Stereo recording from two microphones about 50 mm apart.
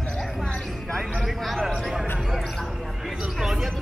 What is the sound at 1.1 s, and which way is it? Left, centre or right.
Speech, centre.